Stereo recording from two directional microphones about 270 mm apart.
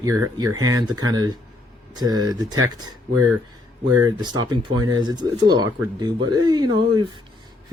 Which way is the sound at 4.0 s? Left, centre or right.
Centre.